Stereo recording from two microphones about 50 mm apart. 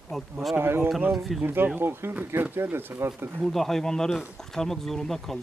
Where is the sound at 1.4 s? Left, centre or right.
Right.